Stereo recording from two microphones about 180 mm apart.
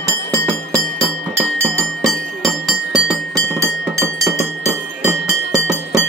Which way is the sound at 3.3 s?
15° right (ahead or behind).